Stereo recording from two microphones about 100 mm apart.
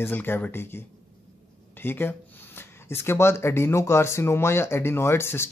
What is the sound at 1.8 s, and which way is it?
Speech, 20° left (ahead or behind).